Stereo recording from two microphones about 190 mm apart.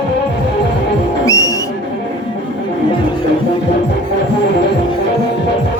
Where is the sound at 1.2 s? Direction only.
20° left (ahead or behind).